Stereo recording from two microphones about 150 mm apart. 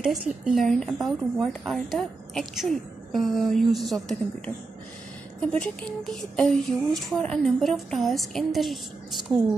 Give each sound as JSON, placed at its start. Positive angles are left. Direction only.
{"t": 0.0, "sound": "speech", "side_deg": -5}
{"t": 5.5, "sound": "speech", "side_deg": 5}